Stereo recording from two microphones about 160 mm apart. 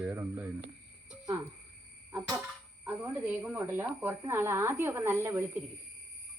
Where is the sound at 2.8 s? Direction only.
10° right (ahead or behind).